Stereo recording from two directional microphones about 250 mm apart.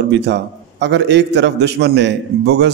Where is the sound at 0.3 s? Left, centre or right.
Right.